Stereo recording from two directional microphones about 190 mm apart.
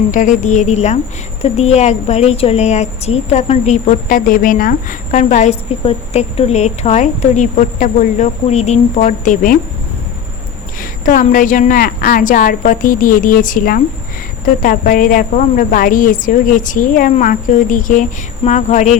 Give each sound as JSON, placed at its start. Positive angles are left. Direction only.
{"t": 0.1, "sound": "a woman's voice", "side_deg": 40}
{"t": 10.8, "sound": "a woman's voice", "side_deg": 45}